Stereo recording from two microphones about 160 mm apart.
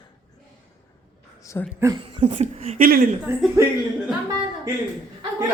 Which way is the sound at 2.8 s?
65° right (ahead or behind).